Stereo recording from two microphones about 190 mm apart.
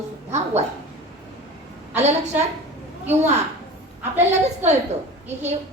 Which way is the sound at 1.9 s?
35° right (ahead or behind).